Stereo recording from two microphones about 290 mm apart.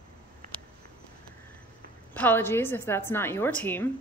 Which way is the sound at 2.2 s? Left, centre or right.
Centre.